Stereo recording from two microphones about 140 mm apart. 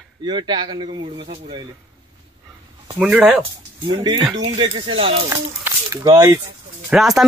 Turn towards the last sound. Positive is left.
turn(degrees=0)  # may be behind; listen again after turning